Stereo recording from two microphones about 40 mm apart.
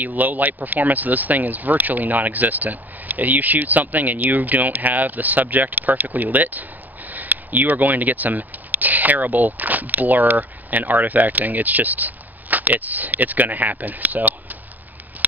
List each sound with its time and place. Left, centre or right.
0.0 s speech: right